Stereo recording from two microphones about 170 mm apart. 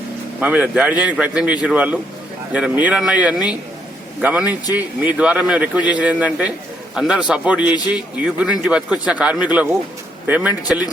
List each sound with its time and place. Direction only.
0.3 s a man's voice: 5° right (ahead or behind)